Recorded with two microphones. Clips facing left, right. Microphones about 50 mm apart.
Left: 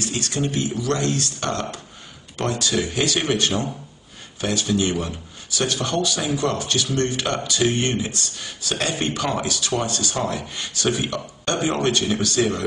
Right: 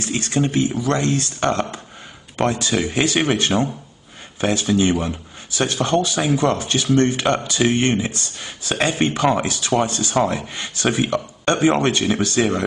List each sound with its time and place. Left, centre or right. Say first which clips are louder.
0.0 s speech: right 4 dB; right